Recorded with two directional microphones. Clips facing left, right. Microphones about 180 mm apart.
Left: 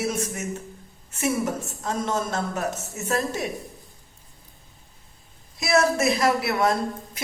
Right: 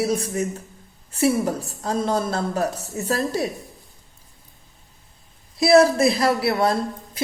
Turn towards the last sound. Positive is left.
turn(degrees=-30)  # may be behind; listen again after turning